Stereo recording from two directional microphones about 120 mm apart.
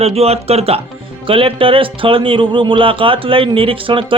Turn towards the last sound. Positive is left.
turn(degrees=-45)  # may be behind; listen again after turning